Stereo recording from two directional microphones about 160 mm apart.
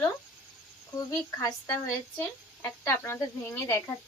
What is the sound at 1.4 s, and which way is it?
Speech, 20° left (ahead or behind).